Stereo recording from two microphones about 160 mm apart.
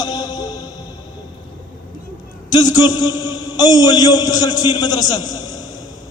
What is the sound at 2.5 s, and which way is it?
A man's voice, 25° left (ahead or behind).